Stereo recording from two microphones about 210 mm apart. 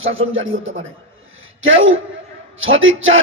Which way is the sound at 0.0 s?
70° right (ahead or behind).